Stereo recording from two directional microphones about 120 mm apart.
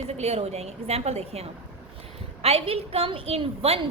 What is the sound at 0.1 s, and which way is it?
A woman's voice, 60° right (ahead or behind).